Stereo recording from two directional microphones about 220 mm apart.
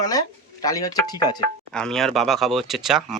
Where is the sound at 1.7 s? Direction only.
5° left (ahead or behind).